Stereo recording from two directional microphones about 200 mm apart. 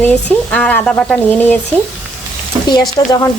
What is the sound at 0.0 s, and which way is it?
Speech, 5° left (ahead or behind).